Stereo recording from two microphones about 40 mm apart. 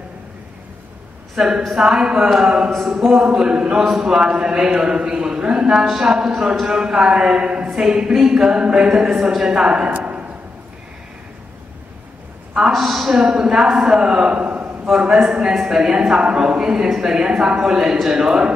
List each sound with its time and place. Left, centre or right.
1.3 s a woman's voice: centre
3.3 s a man's voice: right
3.8 s a man's voice: centre
5.5 s a man's voice: centre
9.8 s a sound: right
12.6 s speech: centre
13.2 s speech: centre; by 14.7 s right
14.9 s a man's voice: centre